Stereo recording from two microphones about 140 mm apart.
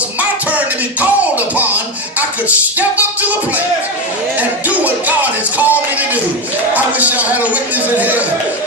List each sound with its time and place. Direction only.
0.2 s music: 10° right (ahead or behind)
4.4 s music: 10° right (ahead or behind)
6.7 s a sound: 10° right (ahead or behind)